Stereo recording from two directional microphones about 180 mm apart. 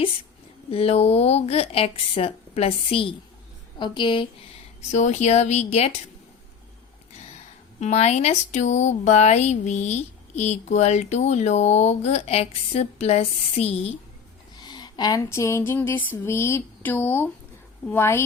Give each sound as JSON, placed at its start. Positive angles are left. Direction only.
{"t": 0.7, "sound": "speech", "side_deg": 35}
{"t": 4.9, "sound": "speech", "side_deg": 40}
{"t": 7.8, "sound": "speech", "side_deg": 40}
{"t": 14.6, "sound": "a sound", "side_deg": 25}
{"t": 16.0, "sound": "speech", "side_deg": 15}